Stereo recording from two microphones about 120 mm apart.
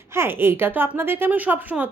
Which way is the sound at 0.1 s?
20° right (ahead or behind).